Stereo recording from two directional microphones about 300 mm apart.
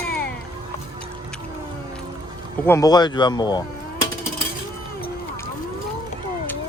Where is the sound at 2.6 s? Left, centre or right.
Centre.